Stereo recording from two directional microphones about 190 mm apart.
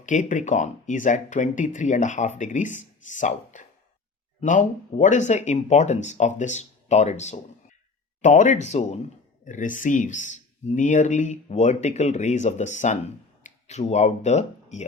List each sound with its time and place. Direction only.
0.0 s speech: 40° left (ahead or behind)